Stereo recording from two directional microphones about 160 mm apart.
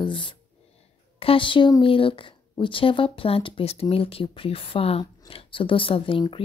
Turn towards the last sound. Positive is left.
turn(degrees=30)  # may be behind; listen again after turning